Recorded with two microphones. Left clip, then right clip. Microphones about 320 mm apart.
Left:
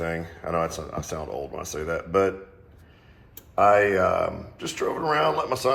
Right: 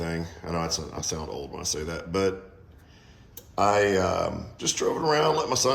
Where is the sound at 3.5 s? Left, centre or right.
Centre.